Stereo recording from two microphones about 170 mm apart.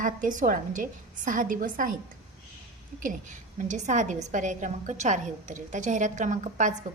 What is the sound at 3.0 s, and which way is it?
A woman's voice, 45° right (ahead or behind).